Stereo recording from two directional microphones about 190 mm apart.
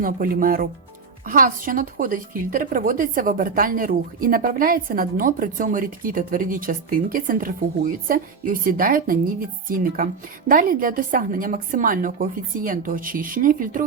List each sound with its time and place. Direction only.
0.0 s a woman's voice: 45° right (ahead or behind)